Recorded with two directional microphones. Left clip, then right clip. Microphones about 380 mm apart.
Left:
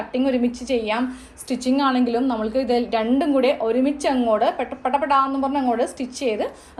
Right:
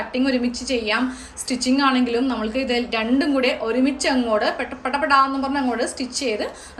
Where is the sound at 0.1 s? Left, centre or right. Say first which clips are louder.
Left 2 dB; centre.